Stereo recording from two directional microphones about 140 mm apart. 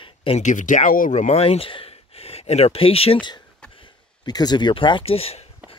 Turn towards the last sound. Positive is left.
turn(degrees=45)  # may be behind; listen again after turning